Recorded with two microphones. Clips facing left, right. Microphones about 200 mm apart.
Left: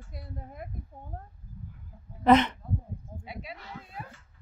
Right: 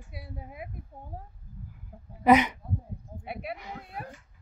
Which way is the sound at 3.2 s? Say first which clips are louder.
Right 7 dB; 60° right (ahead or behind).